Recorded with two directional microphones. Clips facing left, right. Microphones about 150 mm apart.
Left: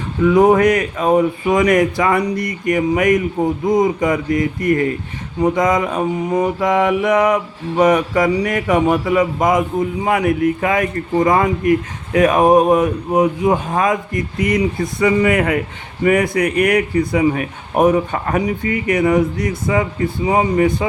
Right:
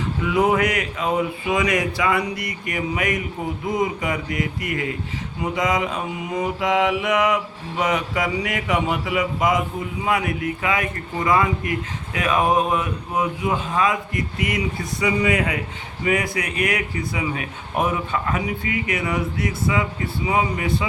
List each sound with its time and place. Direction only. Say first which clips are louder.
0.3 s speech: left 8 dB; 40° left (ahead or behind)